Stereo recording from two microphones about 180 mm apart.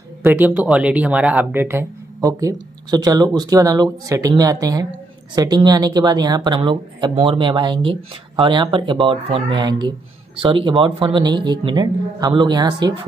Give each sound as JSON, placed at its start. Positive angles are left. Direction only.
{"t": 0.2, "sound": "speech", "side_deg": -10}